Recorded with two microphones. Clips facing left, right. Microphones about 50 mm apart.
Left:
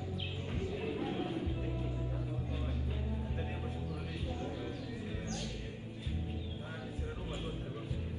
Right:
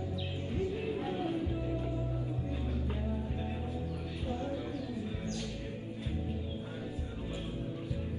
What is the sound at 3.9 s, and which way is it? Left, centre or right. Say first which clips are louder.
Music: right 2 dB; left.